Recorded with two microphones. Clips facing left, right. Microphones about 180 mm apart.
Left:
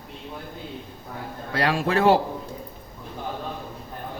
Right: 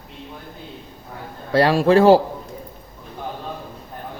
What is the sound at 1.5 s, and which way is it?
Speech, 35° right (ahead or behind).